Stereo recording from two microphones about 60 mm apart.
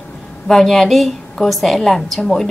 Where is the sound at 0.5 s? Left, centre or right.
Centre.